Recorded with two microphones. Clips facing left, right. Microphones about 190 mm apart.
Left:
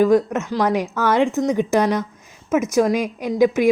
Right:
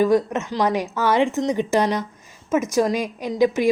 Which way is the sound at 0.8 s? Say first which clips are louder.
Left 1 dB; 10° right (ahead or behind).